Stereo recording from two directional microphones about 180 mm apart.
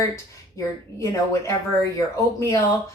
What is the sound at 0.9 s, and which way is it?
Speech, 15° left (ahead or behind).